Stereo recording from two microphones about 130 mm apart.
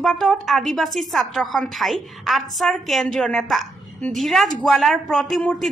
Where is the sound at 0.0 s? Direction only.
Centre (ahead or behind).